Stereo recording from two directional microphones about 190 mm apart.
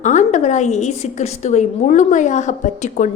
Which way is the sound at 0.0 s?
40° left (ahead or behind).